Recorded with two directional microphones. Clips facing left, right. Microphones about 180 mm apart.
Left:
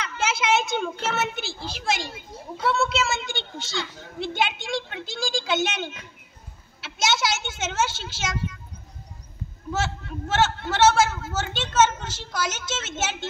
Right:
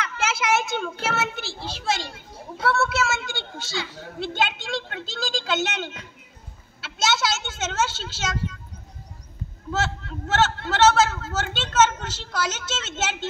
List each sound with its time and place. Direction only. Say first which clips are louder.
0.0 s a child's voice: even; 20° left (ahead or behind)
2.6 s a woman's voice: right 1 dB; 15° left (ahead or behind)
9.7 s a woman's voice: right 1 dB; 10° left (ahead or behind)